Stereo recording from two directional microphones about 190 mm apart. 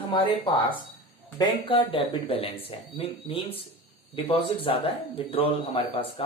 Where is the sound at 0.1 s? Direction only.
25° left (ahead or behind).